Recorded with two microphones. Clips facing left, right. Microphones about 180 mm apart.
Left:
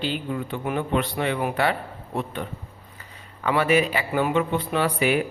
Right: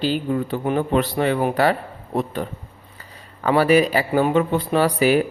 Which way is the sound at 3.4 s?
40° right (ahead or behind).